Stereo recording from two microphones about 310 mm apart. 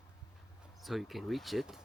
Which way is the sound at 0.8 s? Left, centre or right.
Centre.